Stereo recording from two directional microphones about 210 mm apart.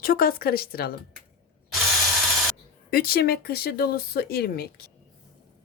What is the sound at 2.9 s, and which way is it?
Speech, 45° left (ahead or behind).